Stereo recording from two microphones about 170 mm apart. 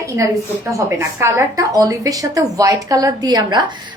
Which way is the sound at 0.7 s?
15° right (ahead or behind).